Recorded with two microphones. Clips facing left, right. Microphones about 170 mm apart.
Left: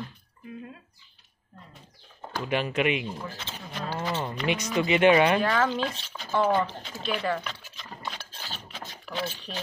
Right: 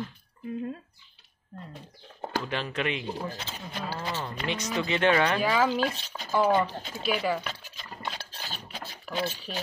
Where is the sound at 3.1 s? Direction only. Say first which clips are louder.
Right 3 dB; 35° right (ahead or behind).